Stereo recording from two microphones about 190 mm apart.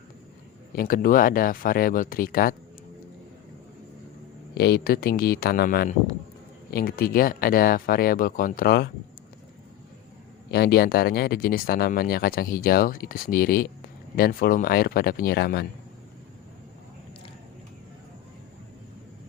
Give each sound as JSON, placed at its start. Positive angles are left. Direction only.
{"t": 0.8, "sound": "speech", "side_deg": 50}
{"t": 4.5, "sound": "speech", "side_deg": 60}
{"t": 10.5, "sound": "speech", "side_deg": 55}